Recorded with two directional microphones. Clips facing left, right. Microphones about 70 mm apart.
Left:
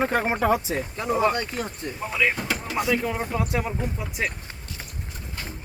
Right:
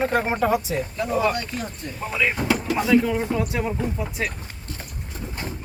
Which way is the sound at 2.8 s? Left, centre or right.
Centre.